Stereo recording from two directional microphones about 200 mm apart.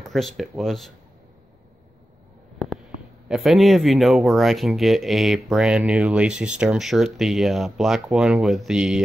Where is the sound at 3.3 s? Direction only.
Centre (ahead or behind).